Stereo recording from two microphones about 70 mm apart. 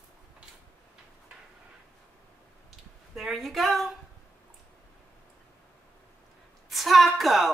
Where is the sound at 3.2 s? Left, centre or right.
Centre.